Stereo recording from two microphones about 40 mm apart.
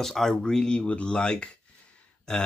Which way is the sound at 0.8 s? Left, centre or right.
Left.